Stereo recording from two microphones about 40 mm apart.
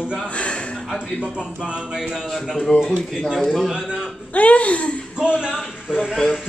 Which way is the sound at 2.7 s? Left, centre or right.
Left.